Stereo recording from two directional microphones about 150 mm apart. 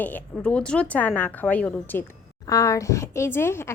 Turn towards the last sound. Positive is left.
turn(degrees=15)  # may be behind; listen again after turning